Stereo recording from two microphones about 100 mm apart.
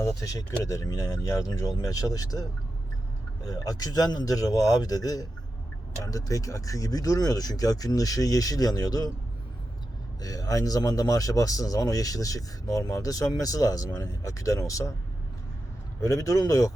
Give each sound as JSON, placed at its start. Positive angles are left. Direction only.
{"t": 0.0, "sound": "speech", "side_deg": 35}
{"t": 10.2, "sound": "speech", "side_deg": 35}
{"t": 16.0, "sound": "speech", "side_deg": 35}